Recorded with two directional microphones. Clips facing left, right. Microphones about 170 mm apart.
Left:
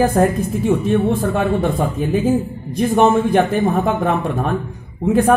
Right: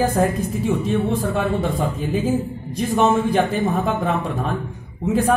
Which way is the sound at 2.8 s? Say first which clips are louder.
Left 4 dB; 55° left (ahead or behind).